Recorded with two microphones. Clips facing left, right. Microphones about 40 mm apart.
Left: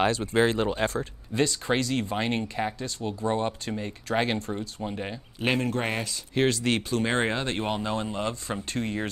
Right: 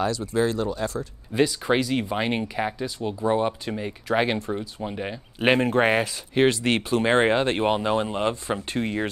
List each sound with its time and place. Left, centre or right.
0.0 s speech: left
1.3 s speech: centre
5.4 s speech: right